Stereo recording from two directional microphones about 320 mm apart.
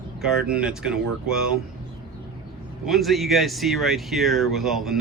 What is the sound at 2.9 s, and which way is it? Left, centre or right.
Speech, centre.